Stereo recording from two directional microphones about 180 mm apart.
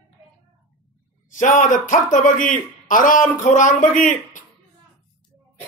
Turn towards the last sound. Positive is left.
turn(degrees=45)  # may be behind; listen again after turning